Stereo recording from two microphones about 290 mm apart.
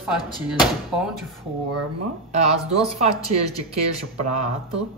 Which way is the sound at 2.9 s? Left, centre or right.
Right.